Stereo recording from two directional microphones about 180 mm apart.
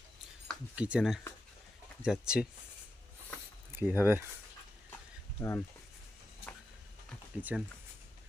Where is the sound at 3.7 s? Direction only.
10° right (ahead or behind).